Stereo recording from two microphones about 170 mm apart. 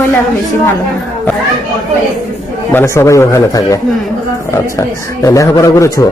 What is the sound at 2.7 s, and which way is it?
A man's voice, 15° left (ahead or behind).